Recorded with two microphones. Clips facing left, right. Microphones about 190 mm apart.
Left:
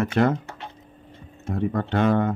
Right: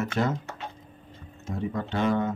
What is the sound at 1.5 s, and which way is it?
Speech, 60° left (ahead or behind).